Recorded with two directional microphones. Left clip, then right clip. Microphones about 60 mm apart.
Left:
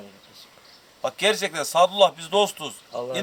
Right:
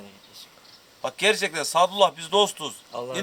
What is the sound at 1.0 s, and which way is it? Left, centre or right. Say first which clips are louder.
A man's voice: even; centre.